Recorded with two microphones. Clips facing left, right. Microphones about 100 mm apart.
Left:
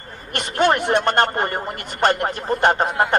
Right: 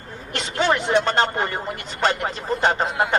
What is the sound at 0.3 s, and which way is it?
Speech, 55° left (ahead or behind).